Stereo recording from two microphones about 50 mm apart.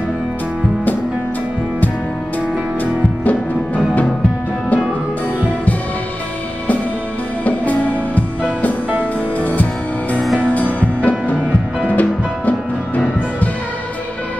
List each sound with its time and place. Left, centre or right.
2.8 s music: left
7.4 s music: left
9.4 s music: left